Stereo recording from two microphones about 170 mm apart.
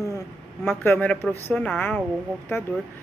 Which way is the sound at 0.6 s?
10° left (ahead or behind).